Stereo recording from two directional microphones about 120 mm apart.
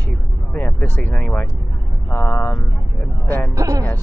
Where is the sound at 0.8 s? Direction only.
10° left (ahead or behind).